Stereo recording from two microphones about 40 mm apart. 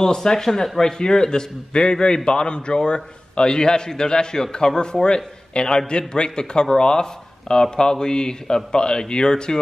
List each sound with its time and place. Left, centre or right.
0.0 s a man's voice: centre